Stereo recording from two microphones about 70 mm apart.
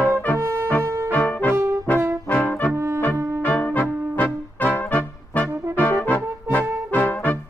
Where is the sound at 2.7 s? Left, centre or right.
Right.